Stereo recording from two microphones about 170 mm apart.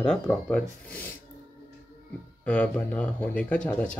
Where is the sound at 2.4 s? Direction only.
10° left (ahead or behind).